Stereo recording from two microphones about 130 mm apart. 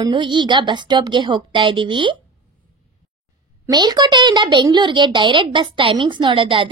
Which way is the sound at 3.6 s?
30° right (ahead or behind).